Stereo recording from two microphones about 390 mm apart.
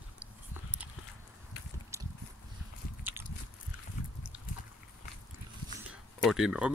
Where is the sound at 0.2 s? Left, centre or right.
Centre.